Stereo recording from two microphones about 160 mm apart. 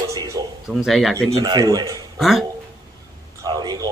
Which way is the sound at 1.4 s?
25° right (ahead or behind).